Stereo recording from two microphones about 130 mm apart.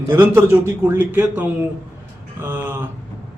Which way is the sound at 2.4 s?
15° right (ahead or behind).